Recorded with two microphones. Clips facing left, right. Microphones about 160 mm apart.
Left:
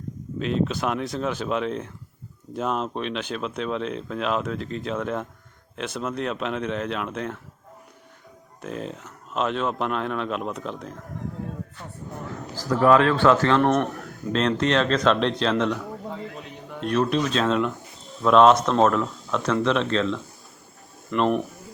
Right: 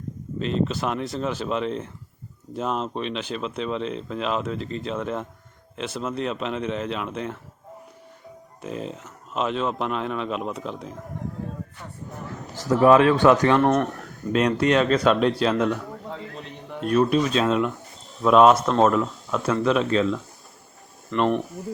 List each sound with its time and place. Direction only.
0.3 s speech: 5° left (ahead or behind)
8.6 s speech: centre (ahead or behind)
12.7 s speech: 15° right (ahead or behind)
13.6 s speech: centre (ahead or behind)
14.3 s speech: 10° right (ahead or behind)
16.0 s a sound: 5° left (ahead or behind)
18.2 s speech: 5° right (ahead or behind)